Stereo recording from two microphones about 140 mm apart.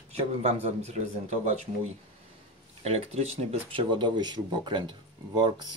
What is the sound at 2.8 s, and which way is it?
Speech, 45° right (ahead or behind).